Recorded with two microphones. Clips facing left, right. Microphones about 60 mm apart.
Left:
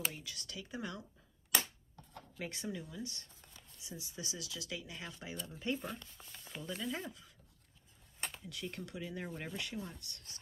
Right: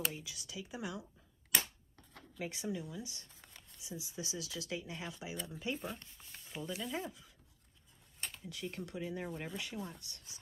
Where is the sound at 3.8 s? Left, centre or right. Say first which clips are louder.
Right 2 dB; right.